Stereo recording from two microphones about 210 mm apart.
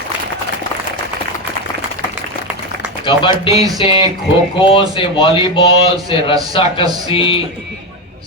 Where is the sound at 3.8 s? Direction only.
20° left (ahead or behind).